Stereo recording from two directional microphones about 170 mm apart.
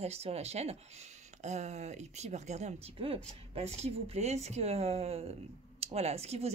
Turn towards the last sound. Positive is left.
turn(degrees=-40)  # may be behind; listen again after turning